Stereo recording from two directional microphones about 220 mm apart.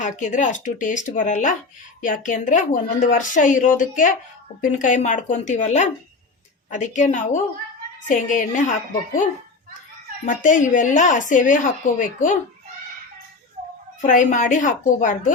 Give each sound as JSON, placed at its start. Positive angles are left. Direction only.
{"t": 0.0, "sound": "a woman's voice", "side_deg": 35}
{"t": 10.2, "sound": "a woman's voice", "side_deg": 35}
{"t": 14.0, "sound": "a woman's voice", "side_deg": 35}